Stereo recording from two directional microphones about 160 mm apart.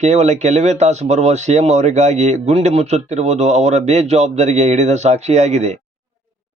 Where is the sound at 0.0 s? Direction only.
45° right (ahead or behind).